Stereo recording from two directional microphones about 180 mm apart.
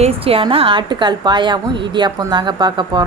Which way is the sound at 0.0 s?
30° right (ahead or behind).